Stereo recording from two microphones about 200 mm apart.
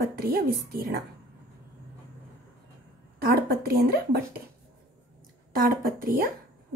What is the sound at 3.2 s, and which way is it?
Speech, 50° right (ahead or behind).